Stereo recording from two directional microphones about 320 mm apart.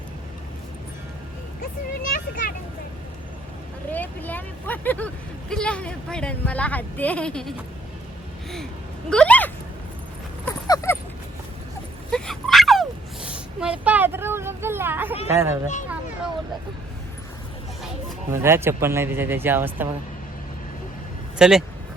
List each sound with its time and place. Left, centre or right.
2.0 s speech: left
3.9 s speech: centre
9.0 s speech: centre
10.4 s dog: centre
12.1 s a sound: centre
15.3 s speech: centre
18.3 s speech: centre
21.3 s speech: centre